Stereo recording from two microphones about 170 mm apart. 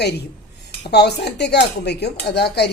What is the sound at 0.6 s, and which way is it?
Speech, 80° left.